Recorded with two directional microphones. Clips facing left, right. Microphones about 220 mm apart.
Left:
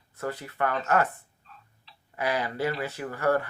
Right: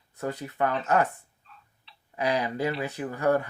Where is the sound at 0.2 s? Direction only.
15° right (ahead or behind).